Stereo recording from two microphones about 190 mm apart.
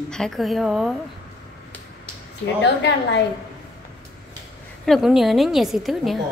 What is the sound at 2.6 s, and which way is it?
Speech, 65° left (ahead or behind).